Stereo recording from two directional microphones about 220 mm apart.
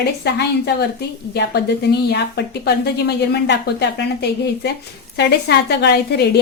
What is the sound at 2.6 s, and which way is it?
A woman's voice, 50° left (ahead or behind).